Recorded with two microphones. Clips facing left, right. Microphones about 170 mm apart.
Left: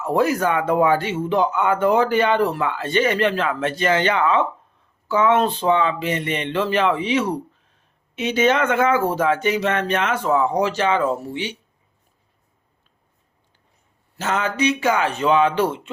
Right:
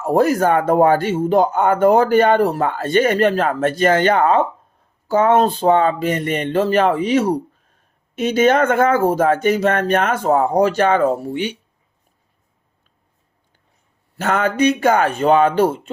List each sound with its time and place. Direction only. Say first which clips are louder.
0.0 s speech: right 4 dB; 45° right (ahead or behind)
14.2 s speech: right 5 dB; 55° right (ahead or behind)